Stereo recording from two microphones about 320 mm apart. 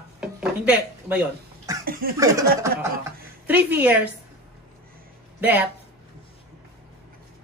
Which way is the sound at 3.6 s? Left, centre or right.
Centre.